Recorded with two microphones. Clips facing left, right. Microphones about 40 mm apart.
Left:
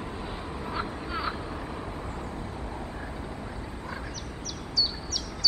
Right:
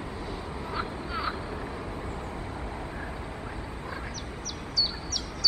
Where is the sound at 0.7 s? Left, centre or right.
Centre.